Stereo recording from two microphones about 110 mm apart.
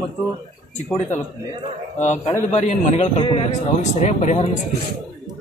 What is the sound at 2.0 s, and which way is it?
A man's voice, 90° left.